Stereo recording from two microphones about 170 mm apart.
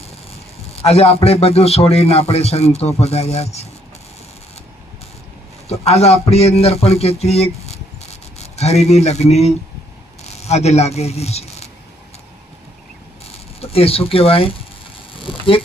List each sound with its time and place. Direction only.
0.8 s speech: 35° left (ahead or behind)
5.8 s speech: 40° left (ahead or behind)
8.0 s a sound: 40° left (ahead or behind)
10.2 s speech: 40° left (ahead or behind)
13.6 s speech: 35° left (ahead or behind)
15.2 s a sound: 30° left (ahead or behind)